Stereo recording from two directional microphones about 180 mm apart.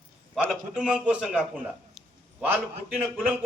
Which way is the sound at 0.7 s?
5° right (ahead or behind).